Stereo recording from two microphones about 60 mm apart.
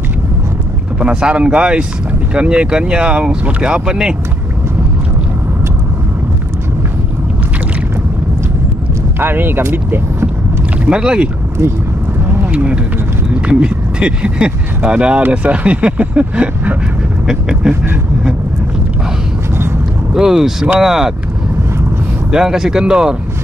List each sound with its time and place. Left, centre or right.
0.9 s speech: centre
9.2 s speech: right
10.9 s speech: centre
12.3 s a sound: right
13.3 s speech: centre
20.2 s speech: centre
22.3 s speech: centre